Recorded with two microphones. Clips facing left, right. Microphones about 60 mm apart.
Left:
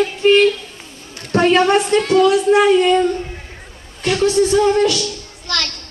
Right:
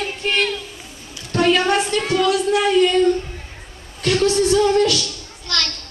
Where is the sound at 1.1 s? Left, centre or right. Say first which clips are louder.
Left 4 dB; left.